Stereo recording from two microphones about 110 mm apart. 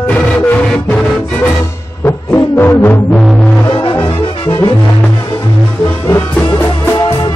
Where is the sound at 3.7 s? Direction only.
55° left (ahead or behind).